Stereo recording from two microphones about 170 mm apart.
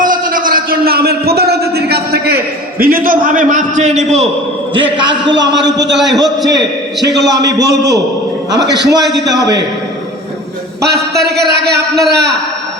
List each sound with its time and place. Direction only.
0.0 s a sound: 55° right (ahead or behind)
4.7 s a man's voice: 90° right
7.8 s a man's voice: 20° right (ahead or behind)
8.5 s a man's voice: 90° right
10.8 s a man's voice: 70° right (ahead or behind)